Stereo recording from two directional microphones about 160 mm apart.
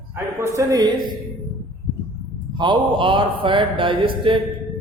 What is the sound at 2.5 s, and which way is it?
Mantra, 30° right (ahead or behind).